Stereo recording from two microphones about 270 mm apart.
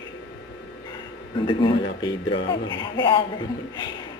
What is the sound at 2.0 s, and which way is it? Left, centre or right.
Speech, centre.